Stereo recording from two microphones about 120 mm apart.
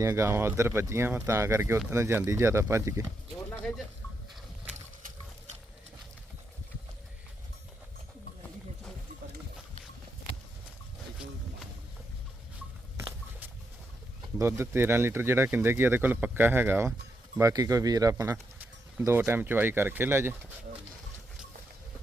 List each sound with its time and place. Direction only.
0.0 s speech: 25° right (ahead or behind)
14.3 s speech: 25° right (ahead or behind)